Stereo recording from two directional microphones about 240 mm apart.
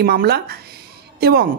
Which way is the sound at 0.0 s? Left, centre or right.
Right.